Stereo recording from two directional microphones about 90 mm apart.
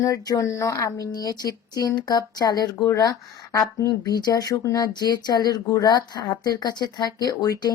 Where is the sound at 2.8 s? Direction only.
35° left (ahead or behind).